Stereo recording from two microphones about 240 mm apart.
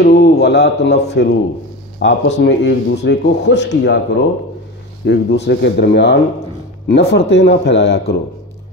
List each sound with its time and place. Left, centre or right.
0.0 s speech: left